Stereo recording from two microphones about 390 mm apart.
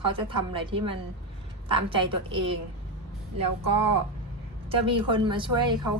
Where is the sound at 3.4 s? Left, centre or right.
Right.